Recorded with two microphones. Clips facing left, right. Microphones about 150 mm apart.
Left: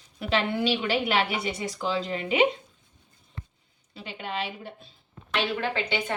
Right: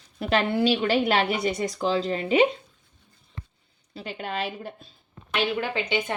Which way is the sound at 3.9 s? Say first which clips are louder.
Right 2 dB; 40° right (ahead or behind).